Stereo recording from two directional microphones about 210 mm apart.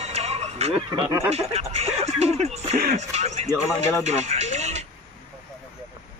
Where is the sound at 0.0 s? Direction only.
30° right (ahead or behind).